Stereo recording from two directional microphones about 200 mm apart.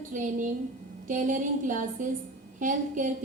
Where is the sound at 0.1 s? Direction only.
40° right (ahead or behind).